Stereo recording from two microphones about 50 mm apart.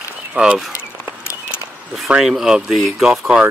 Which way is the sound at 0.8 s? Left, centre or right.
Left.